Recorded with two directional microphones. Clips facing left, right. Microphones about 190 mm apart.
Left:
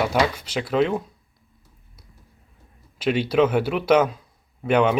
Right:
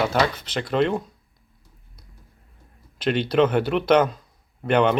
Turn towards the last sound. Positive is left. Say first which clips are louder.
# even
turn(degrees=5)  # may be behind; listen again after turning